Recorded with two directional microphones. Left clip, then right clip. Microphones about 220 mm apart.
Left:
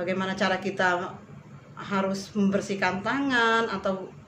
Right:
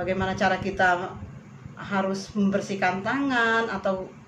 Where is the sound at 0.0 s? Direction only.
15° left (ahead or behind).